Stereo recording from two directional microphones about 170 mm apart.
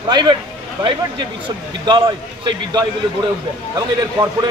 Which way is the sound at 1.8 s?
30° right (ahead or behind).